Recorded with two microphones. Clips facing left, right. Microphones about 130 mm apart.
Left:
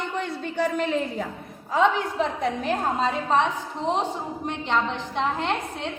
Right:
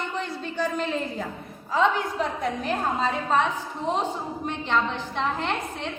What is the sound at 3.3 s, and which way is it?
A woman's voice, 25° left (ahead or behind).